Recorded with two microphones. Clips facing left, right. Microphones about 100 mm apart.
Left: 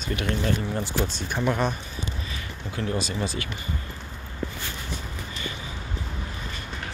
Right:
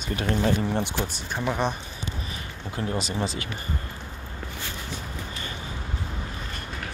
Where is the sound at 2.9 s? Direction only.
25° right (ahead or behind).